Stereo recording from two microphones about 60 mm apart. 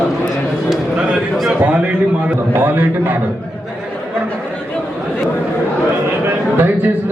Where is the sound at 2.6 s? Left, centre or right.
Right.